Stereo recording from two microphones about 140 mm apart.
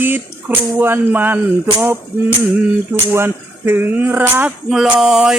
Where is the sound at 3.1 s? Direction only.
15° right (ahead or behind).